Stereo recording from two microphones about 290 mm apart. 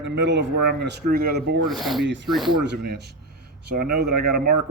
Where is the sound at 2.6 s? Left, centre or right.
Right.